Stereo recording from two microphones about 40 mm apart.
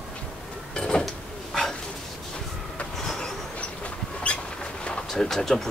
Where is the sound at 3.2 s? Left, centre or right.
Left.